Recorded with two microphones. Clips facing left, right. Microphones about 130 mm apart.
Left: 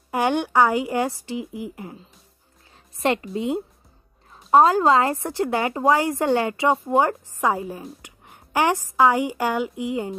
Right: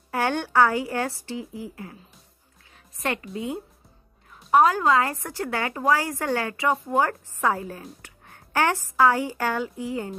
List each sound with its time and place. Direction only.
0.1 s a woman's voice: 15° left (ahead or behind)
3.0 s a woman's voice: 25° left (ahead or behind)